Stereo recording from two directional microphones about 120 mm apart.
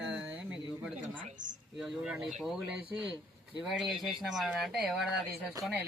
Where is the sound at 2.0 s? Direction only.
5° right (ahead or behind).